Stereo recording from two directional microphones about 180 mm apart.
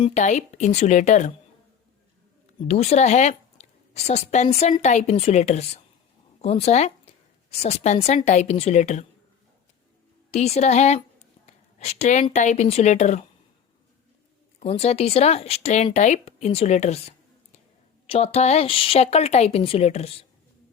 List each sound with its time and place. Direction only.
0.1 s a woman's voice: 40° left (ahead or behind)
2.6 s a woman's voice: 35° left (ahead or behind)
10.3 s a woman's voice: 35° left (ahead or behind)
11.4 s a sound: 40° left (ahead or behind)
12.2 s a woman's voice: 40° left (ahead or behind)
14.6 s a woman's voice: 35° left (ahead or behind)